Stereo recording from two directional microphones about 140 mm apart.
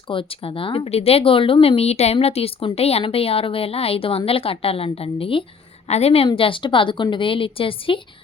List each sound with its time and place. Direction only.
0.1 s a woman's voice: 40° left (ahead or behind)